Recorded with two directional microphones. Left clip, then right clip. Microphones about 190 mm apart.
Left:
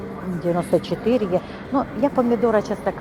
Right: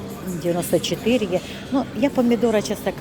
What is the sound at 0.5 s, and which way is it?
Speech, 20° right (ahead or behind).